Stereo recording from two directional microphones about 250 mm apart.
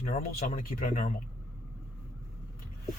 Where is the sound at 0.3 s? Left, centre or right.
Left.